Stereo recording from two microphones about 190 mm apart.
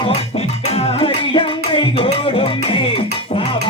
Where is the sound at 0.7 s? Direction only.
30° left (ahead or behind).